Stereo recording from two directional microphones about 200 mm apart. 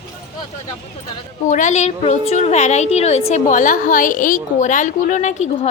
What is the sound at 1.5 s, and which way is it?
A woman's voice, 35° left (ahead or behind).